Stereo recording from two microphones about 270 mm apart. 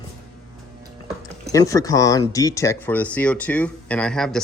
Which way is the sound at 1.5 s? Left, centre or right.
Centre.